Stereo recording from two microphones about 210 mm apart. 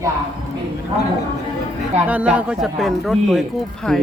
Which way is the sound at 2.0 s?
5° right (ahead or behind).